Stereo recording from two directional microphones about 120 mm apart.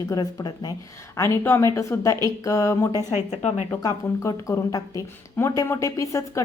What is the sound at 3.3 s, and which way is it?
Speech, 70° left (ahead or behind).